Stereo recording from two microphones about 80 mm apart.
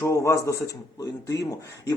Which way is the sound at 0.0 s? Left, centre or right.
Left.